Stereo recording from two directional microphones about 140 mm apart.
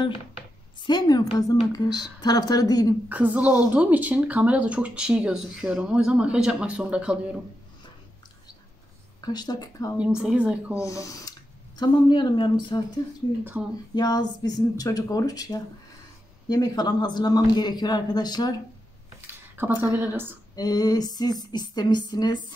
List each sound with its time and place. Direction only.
0.8 s a man's voice: 30° left (ahead or behind)
3.1 s speech: 10° right (ahead or behind)
9.2 s a man's voice: 30° left (ahead or behind)
10.2 s speech: 10° right (ahead or behind)
10.7 s speech: 20° left (ahead or behind)
13.5 s speech: 10° right (ahead or behind)
13.9 s a man's voice: 30° left (ahead or behind)
19.2 s a sound: 15° right (ahead or behind)
20.0 s speech: 15° right (ahead or behind)
20.5 s a man's voice: 25° left (ahead or behind)